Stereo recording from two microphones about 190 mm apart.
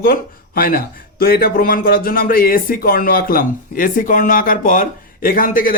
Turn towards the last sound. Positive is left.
turn(degrees=50)  # may be behind; listen again after turning